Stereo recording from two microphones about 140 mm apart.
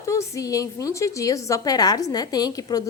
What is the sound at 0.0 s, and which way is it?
A woman's voice, 20° left (ahead or behind).